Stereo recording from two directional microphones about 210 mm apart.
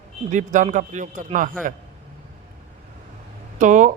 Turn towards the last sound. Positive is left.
turn(degrees=-35)  # may be behind; listen again after turning